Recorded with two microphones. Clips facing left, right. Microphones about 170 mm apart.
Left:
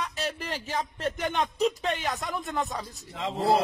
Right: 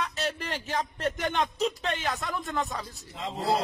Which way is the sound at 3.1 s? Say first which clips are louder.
Left 4 dB; 85° left.